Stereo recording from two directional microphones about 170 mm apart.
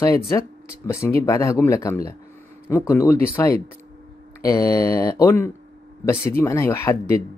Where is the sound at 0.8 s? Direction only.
15° left (ahead or behind).